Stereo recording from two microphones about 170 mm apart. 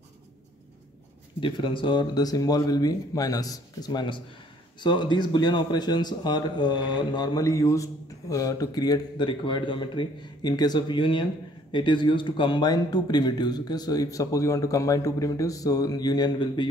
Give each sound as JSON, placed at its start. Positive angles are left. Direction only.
{"t": 1.4, "sound": "a man's voice", "side_deg": 30}